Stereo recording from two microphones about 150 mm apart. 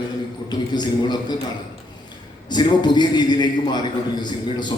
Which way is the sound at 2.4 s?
30° left (ahead or behind).